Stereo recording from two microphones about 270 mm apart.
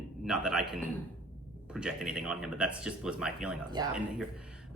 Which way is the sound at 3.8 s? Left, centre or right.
Centre.